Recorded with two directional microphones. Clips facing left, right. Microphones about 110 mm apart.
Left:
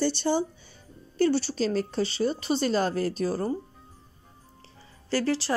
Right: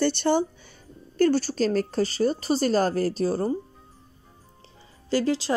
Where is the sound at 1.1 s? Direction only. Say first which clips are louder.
Right 3 dB; 45° right (ahead or behind); by 3.5 s 30° right (ahead or behind).